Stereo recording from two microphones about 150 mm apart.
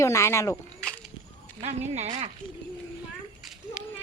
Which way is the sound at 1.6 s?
50° right (ahead or behind).